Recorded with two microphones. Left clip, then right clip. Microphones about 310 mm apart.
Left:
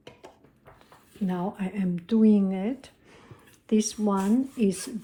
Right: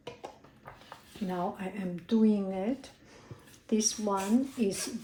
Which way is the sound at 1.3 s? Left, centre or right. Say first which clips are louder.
Left 1 dB; left.